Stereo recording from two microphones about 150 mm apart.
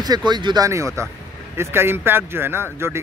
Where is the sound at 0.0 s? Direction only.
25° right (ahead or behind).